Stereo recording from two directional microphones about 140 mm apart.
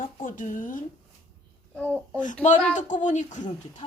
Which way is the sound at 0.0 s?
70° left (ahead or behind).